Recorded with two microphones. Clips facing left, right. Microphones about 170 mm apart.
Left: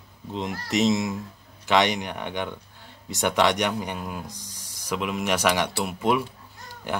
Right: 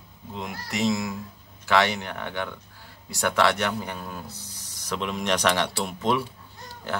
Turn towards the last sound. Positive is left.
turn(degrees=15)  # may be behind; listen again after turning